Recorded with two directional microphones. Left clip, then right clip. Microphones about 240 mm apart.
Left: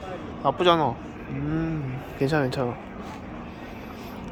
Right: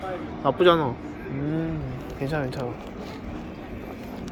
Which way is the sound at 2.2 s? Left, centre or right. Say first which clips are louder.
Left 5 dB; left.